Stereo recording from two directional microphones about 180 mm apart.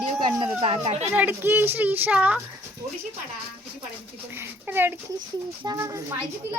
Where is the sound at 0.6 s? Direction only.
30° right (ahead or behind).